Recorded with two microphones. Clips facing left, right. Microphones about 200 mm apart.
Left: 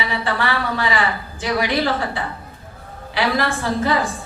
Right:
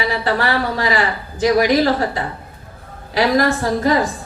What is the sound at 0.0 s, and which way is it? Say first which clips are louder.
A man's voice: right 4 dB; 40° right (ahead or behind).